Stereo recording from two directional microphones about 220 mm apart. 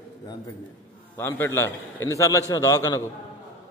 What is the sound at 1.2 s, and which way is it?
A man's voice, 10° left (ahead or behind).